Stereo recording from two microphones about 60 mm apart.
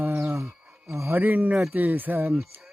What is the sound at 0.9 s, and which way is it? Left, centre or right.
Speech, right.